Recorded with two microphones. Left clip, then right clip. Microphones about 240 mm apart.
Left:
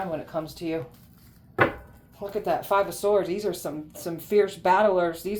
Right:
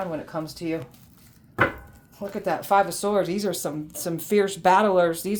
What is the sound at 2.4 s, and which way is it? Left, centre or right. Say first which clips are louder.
Speech: right 3 dB; right.